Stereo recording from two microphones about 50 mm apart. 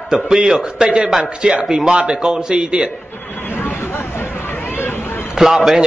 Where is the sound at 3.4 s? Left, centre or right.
Left.